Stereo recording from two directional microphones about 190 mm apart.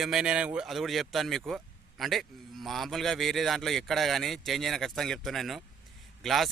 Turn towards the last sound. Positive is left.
turn(degrees=0)  # may be behind; listen again after turning